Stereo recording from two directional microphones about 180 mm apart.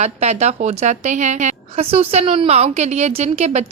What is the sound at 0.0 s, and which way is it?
A woman's voice, 35° right (ahead or behind).